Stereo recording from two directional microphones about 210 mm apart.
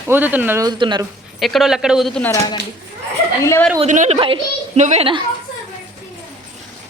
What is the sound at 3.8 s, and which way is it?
Speech, 35° right (ahead or behind).